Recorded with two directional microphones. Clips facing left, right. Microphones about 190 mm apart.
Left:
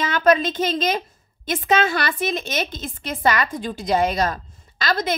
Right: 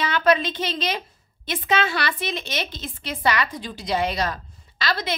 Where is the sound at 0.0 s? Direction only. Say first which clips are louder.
Left 2 dB; 45° left (ahead or behind).